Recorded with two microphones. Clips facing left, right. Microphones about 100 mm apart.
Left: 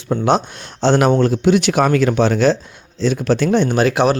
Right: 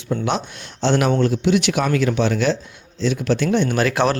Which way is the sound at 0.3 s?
35° left (ahead or behind).